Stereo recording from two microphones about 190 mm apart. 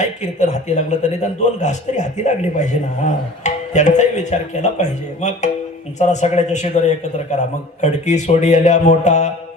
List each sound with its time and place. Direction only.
0.0 s a man's voice: 40° left (ahead or behind)